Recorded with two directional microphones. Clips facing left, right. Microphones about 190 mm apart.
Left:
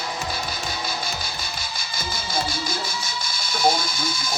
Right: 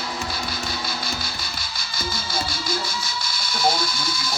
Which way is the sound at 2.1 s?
15° left (ahead or behind).